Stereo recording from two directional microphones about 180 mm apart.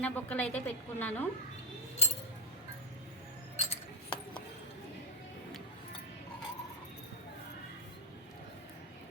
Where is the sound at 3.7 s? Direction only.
25° left (ahead or behind).